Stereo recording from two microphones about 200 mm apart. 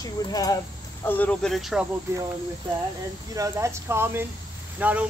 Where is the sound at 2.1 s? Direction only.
15° right (ahead or behind).